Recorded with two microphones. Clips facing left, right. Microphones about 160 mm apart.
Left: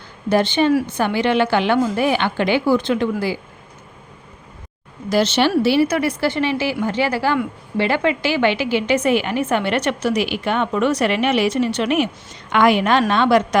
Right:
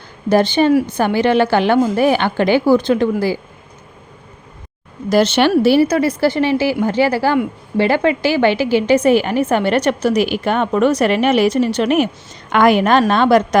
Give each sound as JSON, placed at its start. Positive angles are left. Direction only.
{"t": 0.3, "sound": "a woman's voice", "side_deg": -40}
{"t": 5.0, "sound": "a woman's voice", "side_deg": -50}